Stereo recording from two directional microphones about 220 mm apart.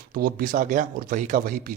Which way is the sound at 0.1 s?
40° right (ahead or behind).